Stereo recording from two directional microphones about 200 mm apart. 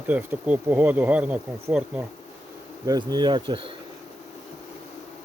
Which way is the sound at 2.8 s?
20° right (ahead or behind).